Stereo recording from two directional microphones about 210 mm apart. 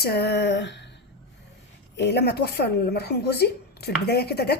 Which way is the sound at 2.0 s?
50° left (ahead or behind).